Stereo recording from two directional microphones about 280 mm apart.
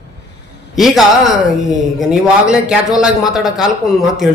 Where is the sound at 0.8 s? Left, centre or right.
Centre.